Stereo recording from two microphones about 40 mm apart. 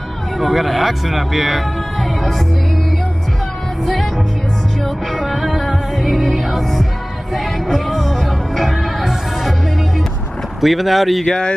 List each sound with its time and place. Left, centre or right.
0.4 s speech: centre
3.8 s music: centre
5.1 s speech: centre
5.4 s music: centre
5.9 s music: centre
10.6 s speech: centre
11.2 s speech: left